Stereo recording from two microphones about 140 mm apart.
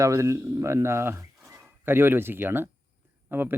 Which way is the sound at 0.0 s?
20° right (ahead or behind).